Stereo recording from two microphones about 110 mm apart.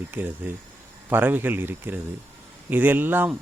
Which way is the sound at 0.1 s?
15° right (ahead or behind).